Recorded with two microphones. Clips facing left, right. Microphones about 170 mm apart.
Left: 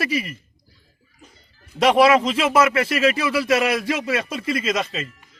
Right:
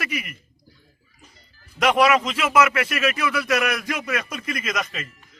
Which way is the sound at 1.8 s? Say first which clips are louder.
Left 3 dB; 30° left (ahead or behind).